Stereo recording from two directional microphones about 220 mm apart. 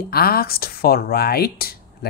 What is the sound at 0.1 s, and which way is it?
Speech, 45° left (ahead or behind).